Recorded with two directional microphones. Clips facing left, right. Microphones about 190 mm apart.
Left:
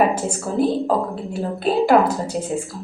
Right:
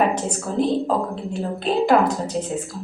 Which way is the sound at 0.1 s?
5° left (ahead or behind).